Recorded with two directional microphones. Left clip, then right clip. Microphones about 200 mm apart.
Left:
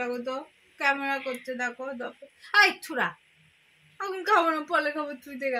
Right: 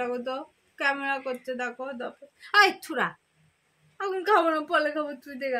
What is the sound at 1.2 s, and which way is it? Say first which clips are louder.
Speech: right 1 dB; 40° right (ahead or behind).